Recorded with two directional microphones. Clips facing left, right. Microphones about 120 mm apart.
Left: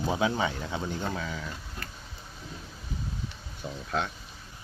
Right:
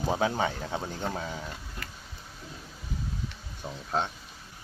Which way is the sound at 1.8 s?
35° left (ahead or behind).